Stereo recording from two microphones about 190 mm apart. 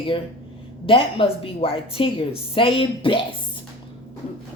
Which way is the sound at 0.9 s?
30° left (ahead or behind).